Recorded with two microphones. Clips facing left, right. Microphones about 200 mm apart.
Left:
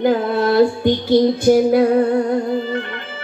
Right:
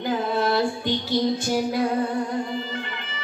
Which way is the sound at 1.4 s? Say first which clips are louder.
Left 11 dB; 55° left (ahead or behind).